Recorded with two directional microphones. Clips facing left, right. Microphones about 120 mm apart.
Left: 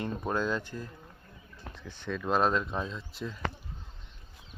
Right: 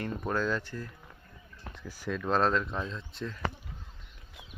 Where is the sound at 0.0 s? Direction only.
20° left (ahead or behind).